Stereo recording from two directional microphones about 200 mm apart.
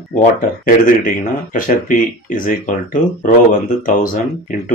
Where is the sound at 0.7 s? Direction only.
40° left (ahead or behind).